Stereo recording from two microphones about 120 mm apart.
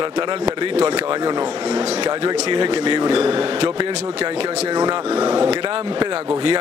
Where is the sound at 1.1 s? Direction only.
35° right (ahead or behind).